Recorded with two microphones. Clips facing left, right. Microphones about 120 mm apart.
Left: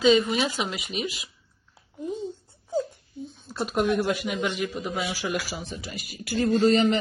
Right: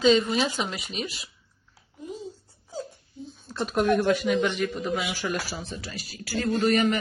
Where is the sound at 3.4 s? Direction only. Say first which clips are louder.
Right 1 dB; 5° left (ahead or behind).